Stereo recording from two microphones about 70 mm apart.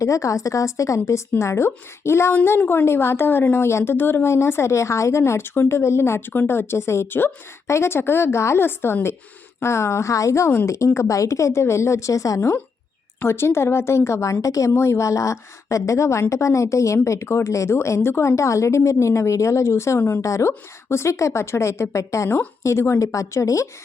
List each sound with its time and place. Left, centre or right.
0.0 s a woman's voice: left
13.1 s a woman's voice: left